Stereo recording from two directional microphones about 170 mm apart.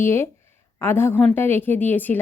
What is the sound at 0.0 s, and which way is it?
Speech, 15° left (ahead or behind).